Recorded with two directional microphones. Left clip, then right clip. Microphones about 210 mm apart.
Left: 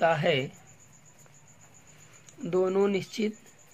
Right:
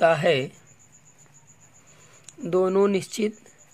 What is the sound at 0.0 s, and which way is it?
Speech, 30° right (ahead or behind).